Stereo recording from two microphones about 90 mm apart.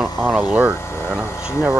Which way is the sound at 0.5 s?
15° right (ahead or behind).